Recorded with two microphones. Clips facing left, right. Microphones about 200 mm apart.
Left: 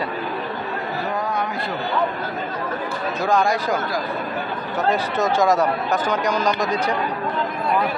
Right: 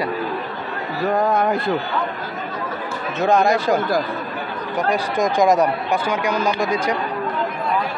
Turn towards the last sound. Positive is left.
turn(degrees=-10)  # may be behind; listen again after turning